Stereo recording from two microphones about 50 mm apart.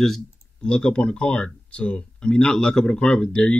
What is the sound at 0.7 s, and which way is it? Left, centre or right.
A man's voice, centre.